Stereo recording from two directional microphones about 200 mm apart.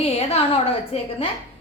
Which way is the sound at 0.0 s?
30° left (ahead or behind).